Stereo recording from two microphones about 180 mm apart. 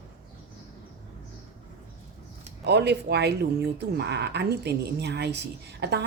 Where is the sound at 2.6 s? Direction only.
70° right (ahead or behind).